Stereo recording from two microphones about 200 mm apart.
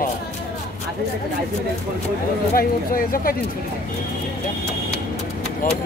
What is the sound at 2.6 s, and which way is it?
Speech, 45° left (ahead or behind).